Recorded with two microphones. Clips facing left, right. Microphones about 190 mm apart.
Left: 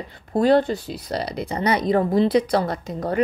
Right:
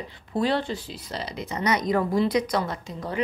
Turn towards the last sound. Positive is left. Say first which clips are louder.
# left 7 dB
turn(degrees=45)  # may be behind; listen again after turning